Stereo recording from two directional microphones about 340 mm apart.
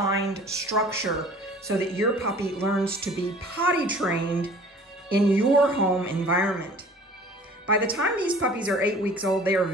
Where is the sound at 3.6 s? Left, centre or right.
Centre.